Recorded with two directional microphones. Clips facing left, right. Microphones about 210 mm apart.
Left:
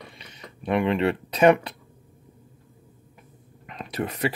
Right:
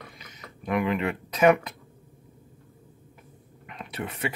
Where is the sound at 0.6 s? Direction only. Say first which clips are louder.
Left 4 dB; 30° left (ahead or behind).